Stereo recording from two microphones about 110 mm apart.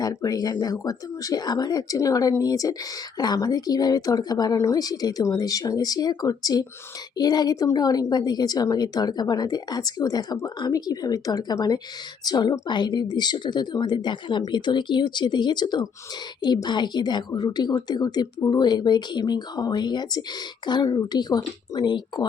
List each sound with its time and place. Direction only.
0.0 s a woman's voice: 35° left (ahead or behind)